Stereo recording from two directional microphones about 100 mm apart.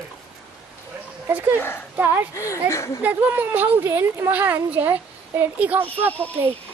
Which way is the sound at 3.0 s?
15° right (ahead or behind).